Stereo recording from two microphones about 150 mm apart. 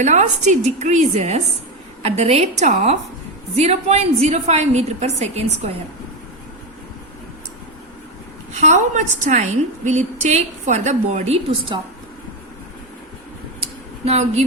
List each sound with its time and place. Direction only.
0.0 s a woman's voice: 50° right (ahead or behind)
8.6 s a woman's voice: 55° right (ahead or behind)
14.0 s a woman's voice: 45° right (ahead or behind)